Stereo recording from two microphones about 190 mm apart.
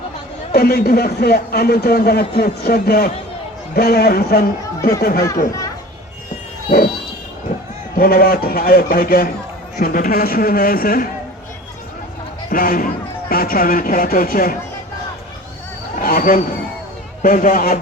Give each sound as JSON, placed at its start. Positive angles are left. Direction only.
{"t": 0.5, "sound": "speech", "side_deg": 55}
{"t": 5.5, "sound": "a child's voice", "side_deg": 15}
{"t": 6.7, "sound": "speech", "side_deg": 45}
{"t": 7.9, "sound": "speech", "side_deg": 50}
{"t": 12.5, "sound": "speech", "side_deg": 50}
{"t": 16.0, "sound": "a sound", "side_deg": 50}
{"t": 17.2, "sound": "speech", "side_deg": 45}